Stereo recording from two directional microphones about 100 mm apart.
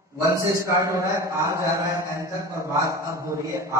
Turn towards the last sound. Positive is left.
turn(degrees=-30)  # may be behind; listen again after turning